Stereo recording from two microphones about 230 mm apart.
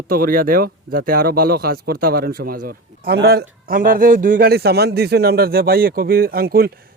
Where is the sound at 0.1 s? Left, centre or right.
Right.